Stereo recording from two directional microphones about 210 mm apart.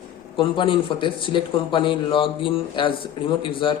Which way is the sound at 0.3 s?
25° left (ahead or behind).